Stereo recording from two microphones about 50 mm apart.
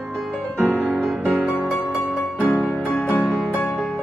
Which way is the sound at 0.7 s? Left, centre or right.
Left.